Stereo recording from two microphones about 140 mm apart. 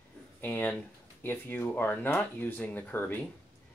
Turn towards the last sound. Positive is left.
turn(degrees=15)  # may be behind; listen again after turning